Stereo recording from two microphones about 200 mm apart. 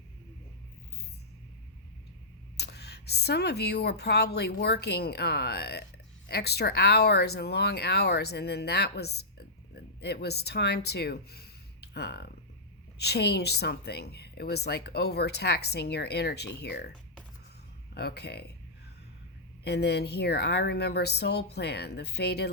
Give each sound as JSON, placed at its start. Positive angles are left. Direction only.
{"t": 2.6, "sound": "a woman's voice", "side_deg": 55}
{"t": 17.9, "sound": "a woman's voice", "side_deg": 55}
{"t": 19.6, "sound": "a woman's voice", "side_deg": 55}